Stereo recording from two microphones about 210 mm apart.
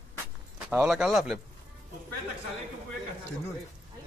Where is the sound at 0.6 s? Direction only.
5° right (ahead or behind).